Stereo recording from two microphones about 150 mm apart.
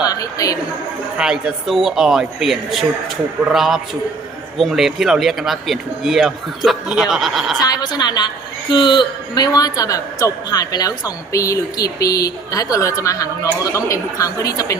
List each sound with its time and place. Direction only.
0.0 s a sound: 25° left (ahead or behind)
1.2 s speech: 5° right (ahead or behind)
7.6 s a man's voice: 25° left (ahead or behind)